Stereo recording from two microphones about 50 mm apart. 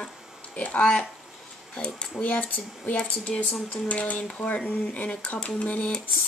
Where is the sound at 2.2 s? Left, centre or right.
Left.